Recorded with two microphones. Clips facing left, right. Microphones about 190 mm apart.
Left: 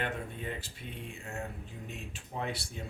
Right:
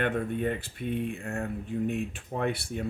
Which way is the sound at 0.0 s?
60° right (ahead or behind).